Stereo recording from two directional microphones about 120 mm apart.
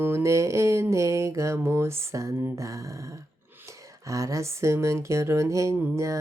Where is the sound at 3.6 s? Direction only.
25° right (ahead or behind).